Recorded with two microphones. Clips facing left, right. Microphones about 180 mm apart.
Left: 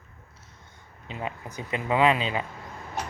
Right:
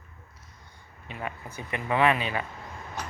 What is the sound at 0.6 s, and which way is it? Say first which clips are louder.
Speech: left 2 dB; 20° left (ahead or behind).